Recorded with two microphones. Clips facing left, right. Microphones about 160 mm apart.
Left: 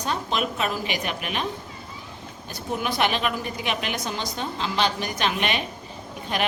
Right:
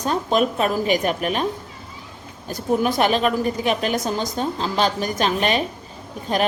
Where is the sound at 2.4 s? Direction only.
45° right (ahead or behind).